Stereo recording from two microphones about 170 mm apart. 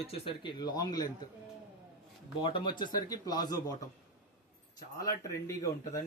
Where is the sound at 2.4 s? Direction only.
30° left (ahead or behind).